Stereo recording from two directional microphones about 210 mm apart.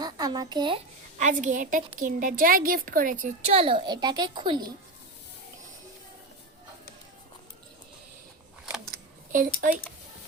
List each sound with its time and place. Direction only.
0.0 s a child's voice: 20° right (ahead or behind)
1.2 s a woman's voice: 35° right (ahead or behind); by 4.6 s 20° right (ahead or behind)
8.8 s a sound: 40° right (ahead or behind)